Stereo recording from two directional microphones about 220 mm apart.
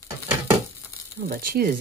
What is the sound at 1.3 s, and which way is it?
Speech, 40° right (ahead or behind).